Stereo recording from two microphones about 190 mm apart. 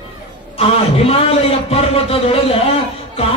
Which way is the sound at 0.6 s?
30° left (ahead or behind).